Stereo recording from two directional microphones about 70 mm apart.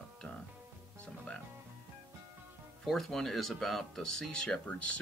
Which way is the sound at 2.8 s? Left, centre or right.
Centre.